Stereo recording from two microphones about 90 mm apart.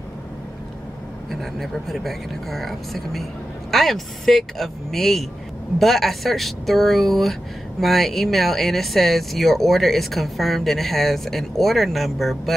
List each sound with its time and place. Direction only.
1.3 s speech: centre (ahead or behind)